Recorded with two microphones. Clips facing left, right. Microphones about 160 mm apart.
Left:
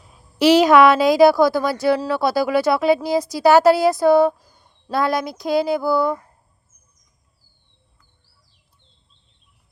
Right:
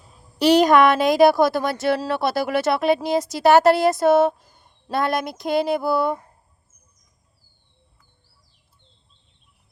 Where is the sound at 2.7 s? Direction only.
Centre (ahead or behind).